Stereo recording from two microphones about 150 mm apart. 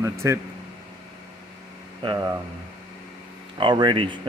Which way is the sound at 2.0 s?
25° right (ahead or behind).